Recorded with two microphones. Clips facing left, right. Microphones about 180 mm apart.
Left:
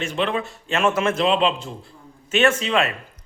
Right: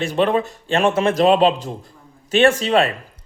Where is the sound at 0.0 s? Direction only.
40° right (ahead or behind).